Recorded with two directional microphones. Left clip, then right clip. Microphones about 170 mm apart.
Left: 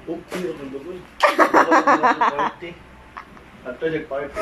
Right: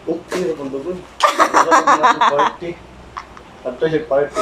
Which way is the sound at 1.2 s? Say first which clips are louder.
Right 2 dB; 30° left (ahead or behind).